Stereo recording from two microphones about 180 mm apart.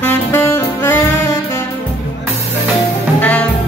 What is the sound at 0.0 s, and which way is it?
Saxophone, 15° left (ahead or behind).